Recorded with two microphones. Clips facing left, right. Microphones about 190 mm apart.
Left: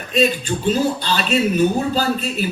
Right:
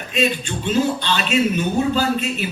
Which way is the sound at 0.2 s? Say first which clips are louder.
Left 3 dB; 35° left (ahead or behind).